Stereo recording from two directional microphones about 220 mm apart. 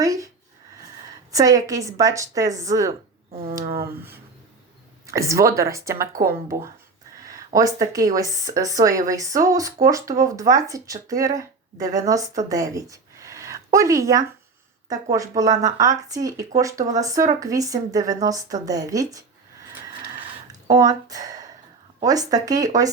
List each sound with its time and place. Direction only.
0.0 s a sound: 15° right (ahead or behind)
1.3 s speech: 15° right (ahead or behind)
15.4 s speech: 15° right (ahead or behind)
20.5 s speech: 15° right (ahead or behind)